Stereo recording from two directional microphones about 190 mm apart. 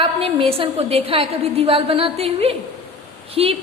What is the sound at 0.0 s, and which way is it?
A woman's voice, 30° right (ahead or behind).